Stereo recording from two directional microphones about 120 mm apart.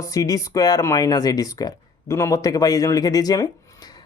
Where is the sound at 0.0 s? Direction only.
25° left (ahead or behind).